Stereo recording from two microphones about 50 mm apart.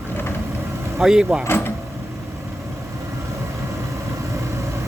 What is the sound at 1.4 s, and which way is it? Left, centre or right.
Vehicle, left.